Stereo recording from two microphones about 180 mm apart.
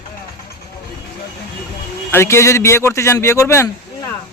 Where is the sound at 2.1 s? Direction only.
15° left (ahead or behind).